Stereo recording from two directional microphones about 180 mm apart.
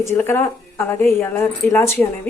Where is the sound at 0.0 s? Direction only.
15° left (ahead or behind).